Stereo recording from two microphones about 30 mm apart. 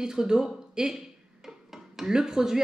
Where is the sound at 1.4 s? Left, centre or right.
Centre.